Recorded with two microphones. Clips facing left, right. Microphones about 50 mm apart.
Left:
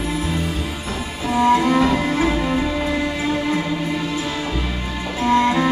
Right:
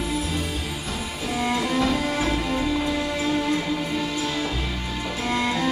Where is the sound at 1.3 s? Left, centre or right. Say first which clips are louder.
Left 9 dB; left.